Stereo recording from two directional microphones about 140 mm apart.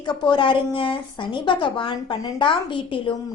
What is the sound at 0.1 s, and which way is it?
A woman's voice, 35° left (ahead or behind).